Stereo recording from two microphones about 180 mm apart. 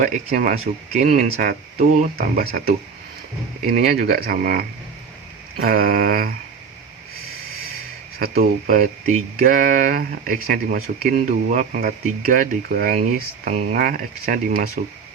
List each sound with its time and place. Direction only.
0.0 s speech: 45° right (ahead or behind)
3.7 s speech: 55° right (ahead or behind)
8.2 s speech: 50° right (ahead or behind)